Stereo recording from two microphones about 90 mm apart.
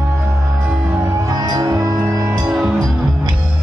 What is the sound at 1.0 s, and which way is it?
Music, 35° right (ahead or behind).